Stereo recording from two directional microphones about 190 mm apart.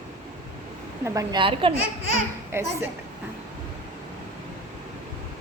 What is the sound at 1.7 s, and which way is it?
Speech, 50° right (ahead or behind).